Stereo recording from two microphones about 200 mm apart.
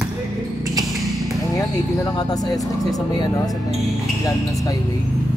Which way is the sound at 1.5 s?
20° left (ahead or behind).